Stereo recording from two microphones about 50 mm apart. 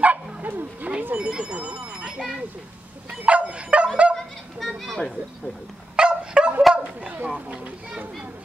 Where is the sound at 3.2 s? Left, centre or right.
Right.